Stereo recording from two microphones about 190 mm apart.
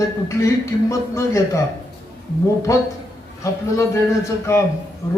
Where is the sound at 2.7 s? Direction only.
15° left (ahead or behind).